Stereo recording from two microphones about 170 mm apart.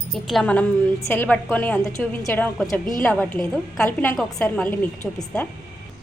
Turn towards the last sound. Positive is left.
turn(degrees=10)  # may be behind; listen again after turning